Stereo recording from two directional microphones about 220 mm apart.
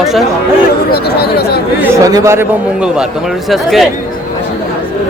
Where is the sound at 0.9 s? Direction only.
45° left (ahead or behind).